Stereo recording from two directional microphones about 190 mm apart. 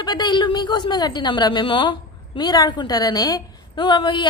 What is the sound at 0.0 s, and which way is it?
A woman's voice, 20° left (ahead or behind).